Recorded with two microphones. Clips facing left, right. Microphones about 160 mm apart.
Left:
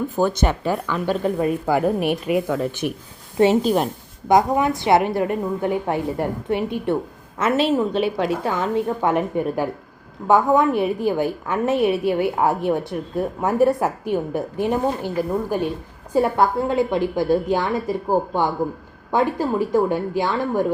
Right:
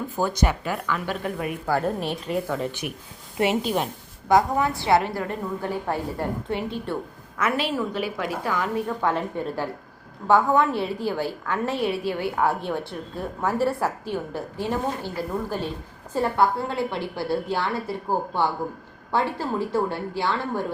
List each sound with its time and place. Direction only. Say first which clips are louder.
0.2 s a woman's voice: left 4 dB; 20° left (ahead or behind)
1.6 s a woman's voice: left 2 dB; 15° left (ahead or behind)
2.8 s a woman's voice: left 7 dB; 40° left (ahead or behind)
4.3 s a woman's voice: left 3 dB; 20° left (ahead or behind)